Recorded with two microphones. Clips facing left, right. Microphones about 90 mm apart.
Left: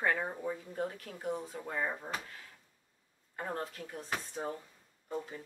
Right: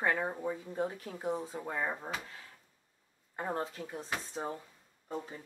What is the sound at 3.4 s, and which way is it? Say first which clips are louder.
Speech: right 3 dB; 15° right (ahead or behind).